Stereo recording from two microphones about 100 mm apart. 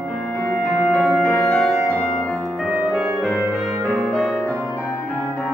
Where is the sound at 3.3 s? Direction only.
5° left (ahead or behind).